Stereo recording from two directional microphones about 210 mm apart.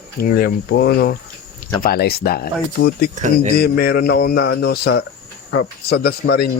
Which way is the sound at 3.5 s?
45° left (ahead or behind).